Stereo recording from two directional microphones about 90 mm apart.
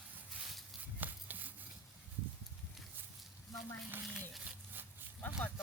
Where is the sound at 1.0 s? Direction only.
20° right (ahead or behind).